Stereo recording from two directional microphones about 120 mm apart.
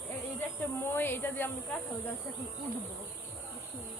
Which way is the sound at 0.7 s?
20° left (ahead or behind).